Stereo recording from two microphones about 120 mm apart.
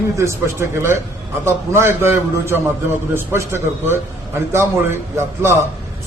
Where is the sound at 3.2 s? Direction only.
20° right (ahead or behind).